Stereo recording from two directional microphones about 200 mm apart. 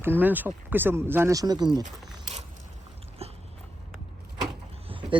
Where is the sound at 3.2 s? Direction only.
30° right (ahead or behind).